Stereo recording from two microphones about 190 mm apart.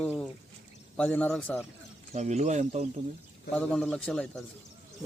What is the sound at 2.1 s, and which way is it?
Speech, 35° right (ahead or behind).